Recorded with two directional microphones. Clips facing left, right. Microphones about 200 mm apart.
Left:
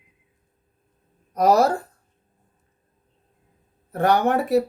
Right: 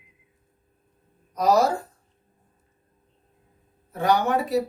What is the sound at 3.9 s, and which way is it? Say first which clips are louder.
Speech: left 3 dB; 60° left (ahead or behind).